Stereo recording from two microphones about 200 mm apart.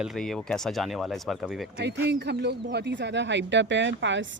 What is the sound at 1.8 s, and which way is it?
Speech, 55° right (ahead or behind).